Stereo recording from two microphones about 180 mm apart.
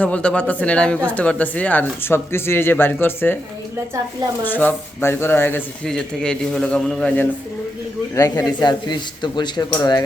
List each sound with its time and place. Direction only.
0.0 s speech: 5° left (ahead or behind)
4.4 s speech: 10° left (ahead or behind)
8.1 s speech: 20° left (ahead or behind)